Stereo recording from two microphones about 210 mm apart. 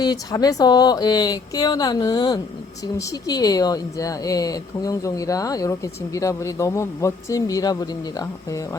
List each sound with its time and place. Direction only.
0.0 s speech: 20° left (ahead or behind)